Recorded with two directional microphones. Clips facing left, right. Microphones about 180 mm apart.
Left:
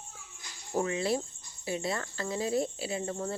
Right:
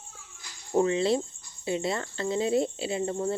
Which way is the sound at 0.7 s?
25° right (ahead or behind).